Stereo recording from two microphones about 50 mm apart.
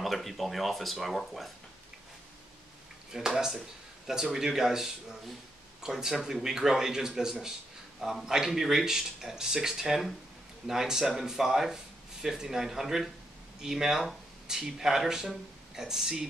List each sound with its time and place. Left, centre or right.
0.0 s speech: centre
3.1 s speech: centre